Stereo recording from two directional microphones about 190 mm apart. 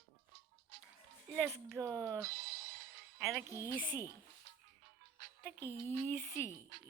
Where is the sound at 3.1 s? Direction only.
Centre (ahead or behind).